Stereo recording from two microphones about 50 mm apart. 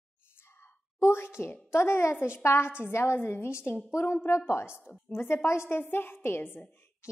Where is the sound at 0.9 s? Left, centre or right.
Left.